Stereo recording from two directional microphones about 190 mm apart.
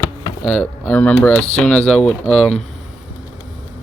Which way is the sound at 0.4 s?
5° left (ahead or behind).